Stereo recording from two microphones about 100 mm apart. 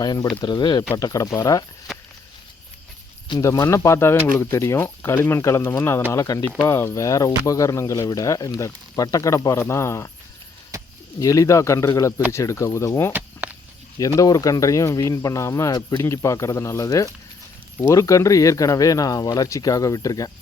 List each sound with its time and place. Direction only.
0.0 s speech: 40° left (ahead or behind)
0.9 s speech: 35° left (ahead or behind)
3.4 s speech: 35° left (ahead or behind)
6.1 s speech: 40° left (ahead or behind)
11.2 s speech: 35° left (ahead or behind)
14.2 s speech: 35° left (ahead or behind)
15.7 s speech: 40° left (ahead or behind)